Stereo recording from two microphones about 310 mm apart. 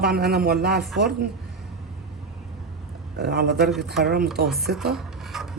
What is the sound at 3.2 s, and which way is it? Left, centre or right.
Speech, right.